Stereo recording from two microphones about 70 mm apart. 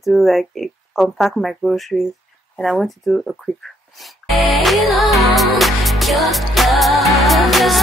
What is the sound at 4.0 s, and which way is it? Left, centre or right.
Music, centre.